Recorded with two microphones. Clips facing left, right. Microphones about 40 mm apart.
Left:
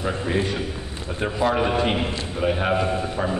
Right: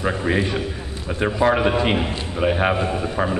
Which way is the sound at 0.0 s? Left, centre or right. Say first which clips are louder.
Right 3 dB; right.